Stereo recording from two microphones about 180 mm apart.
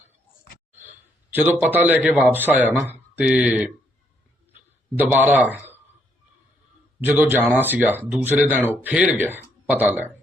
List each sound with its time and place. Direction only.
0.7 s a man's voice: 10° right (ahead or behind)
4.9 s speech: 10° right (ahead or behind)
7.0 s speech: 10° right (ahead or behind)